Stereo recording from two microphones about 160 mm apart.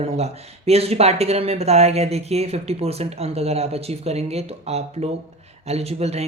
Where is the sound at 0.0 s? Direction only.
40° right (ahead or behind).